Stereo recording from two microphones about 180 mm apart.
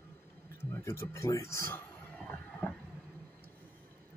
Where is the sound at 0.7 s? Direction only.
15° left (ahead or behind).